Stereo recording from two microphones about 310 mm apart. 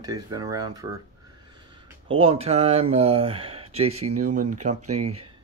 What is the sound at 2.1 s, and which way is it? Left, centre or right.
Speech, centre.